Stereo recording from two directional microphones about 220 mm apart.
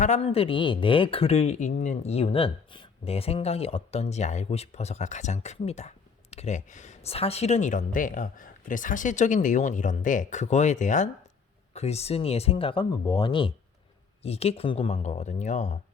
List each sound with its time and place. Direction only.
0.0 s speech: 30° left (ahead or behind)